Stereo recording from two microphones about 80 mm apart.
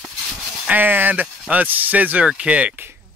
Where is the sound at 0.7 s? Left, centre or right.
Right.